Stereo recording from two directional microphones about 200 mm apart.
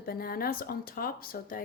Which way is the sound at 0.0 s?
50° left (ahead or behind).